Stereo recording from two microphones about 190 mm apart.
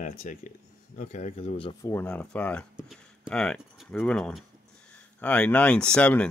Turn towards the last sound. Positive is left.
turn(degrees=5)  # may be behind; listen again after turning